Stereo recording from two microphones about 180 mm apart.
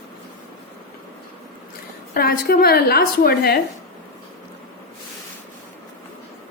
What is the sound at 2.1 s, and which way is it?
A woman's voice, 55° left (ahead or behind).